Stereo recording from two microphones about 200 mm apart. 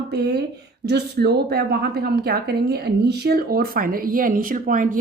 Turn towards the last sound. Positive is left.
turn(degrees=-40)  # may be behind; listen again after turning